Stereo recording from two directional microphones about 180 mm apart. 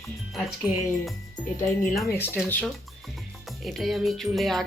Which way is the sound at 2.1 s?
10° left (ahead or behind).